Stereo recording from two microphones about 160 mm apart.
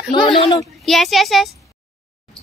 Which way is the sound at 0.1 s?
30° left (ahead or behind).